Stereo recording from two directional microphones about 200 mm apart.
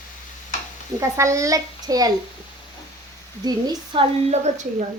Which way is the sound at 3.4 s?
20° right (ahead or behind).